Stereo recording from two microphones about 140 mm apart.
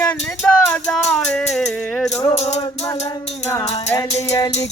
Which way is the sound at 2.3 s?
50° left (ahead or behind).